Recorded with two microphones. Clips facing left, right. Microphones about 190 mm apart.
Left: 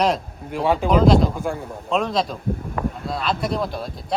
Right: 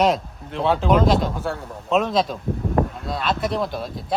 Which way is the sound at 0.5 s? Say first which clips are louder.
Left 1 dB; 10° left (ahead or behind).